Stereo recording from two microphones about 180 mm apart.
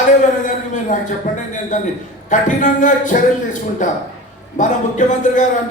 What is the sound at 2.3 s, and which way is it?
A man's voice, 45° left (ahead or behind).